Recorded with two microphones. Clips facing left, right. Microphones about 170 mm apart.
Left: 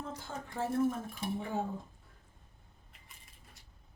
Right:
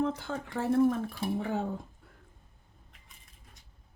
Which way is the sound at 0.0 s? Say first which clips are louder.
Right 11 dB; 70° right (ahead or behind).